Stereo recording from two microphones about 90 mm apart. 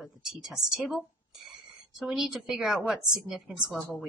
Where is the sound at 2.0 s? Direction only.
Centre (ahead or behind).